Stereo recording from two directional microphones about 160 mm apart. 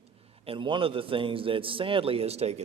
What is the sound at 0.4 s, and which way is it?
A man's voice, 30° right (ahead or behind).